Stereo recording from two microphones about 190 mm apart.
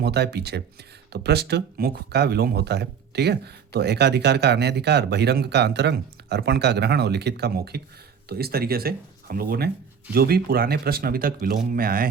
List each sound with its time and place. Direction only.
0.0 s speech: 60° right (ahead or behind)